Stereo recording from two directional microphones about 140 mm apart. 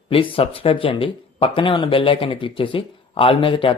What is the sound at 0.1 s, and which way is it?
Speech, 40° left (ahead or behind).